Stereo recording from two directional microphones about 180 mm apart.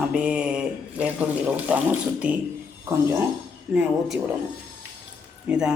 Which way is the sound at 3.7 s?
5° right (ahead or behind).